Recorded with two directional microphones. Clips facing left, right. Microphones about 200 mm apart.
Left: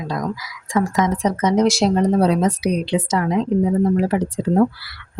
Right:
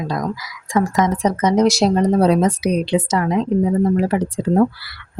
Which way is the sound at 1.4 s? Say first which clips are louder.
Right 1 dB; 40° right (ahead or behind).